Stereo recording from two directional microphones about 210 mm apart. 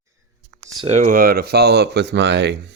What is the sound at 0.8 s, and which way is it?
Speech, 35° right (ahead or behind).